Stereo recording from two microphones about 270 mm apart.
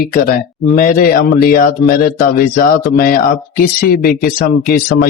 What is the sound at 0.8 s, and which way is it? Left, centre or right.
Speech, left.